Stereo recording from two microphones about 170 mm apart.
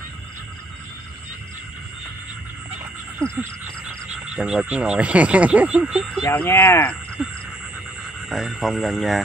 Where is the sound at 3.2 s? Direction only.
5° left (ahead or behind).